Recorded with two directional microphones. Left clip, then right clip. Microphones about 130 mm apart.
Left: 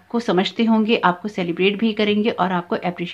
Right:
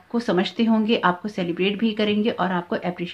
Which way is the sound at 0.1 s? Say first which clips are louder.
Left 3 dB; 25° left (ahead or behind).